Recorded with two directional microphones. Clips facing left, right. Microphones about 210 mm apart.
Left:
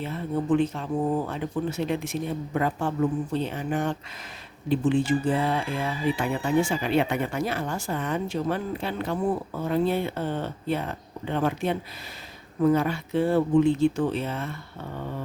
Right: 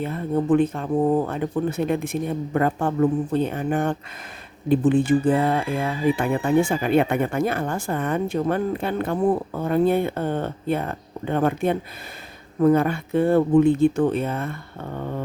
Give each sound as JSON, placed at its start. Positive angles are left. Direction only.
{"t": 0.0, "sound": "speech", "side_deg": -50}